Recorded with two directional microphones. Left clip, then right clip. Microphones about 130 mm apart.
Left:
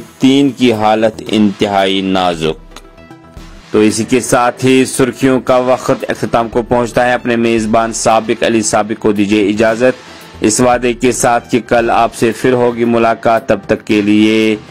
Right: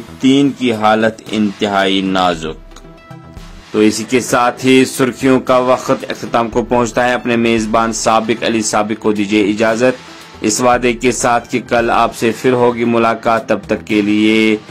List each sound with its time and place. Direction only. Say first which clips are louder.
0.2 s speech: left 2 dB; 45° left (ahead or behind)
3.7 s speech: left 2 dB; 30° left (ahead or behind)